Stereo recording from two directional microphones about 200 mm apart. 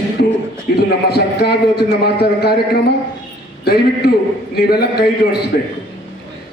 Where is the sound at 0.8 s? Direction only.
55° left (ahead or behind).